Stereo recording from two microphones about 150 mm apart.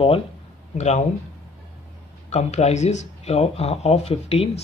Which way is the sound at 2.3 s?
50° left (ahead or behind).